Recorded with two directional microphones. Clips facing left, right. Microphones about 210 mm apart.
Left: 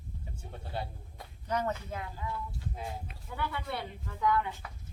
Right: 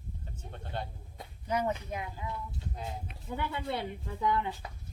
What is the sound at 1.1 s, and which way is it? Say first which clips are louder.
Speech: right 1 dB; 10° right (ahead or behind).